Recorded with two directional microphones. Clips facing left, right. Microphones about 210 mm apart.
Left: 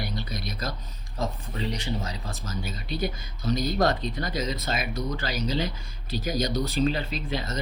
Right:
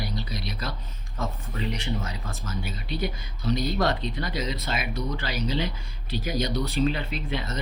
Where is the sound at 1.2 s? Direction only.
35° left (ahead or behind).